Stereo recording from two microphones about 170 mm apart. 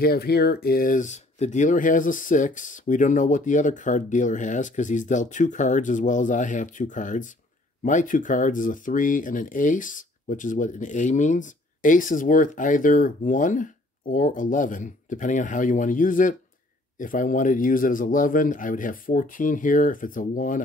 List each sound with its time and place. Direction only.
0.0 s speech: 65° left (ahead or behind)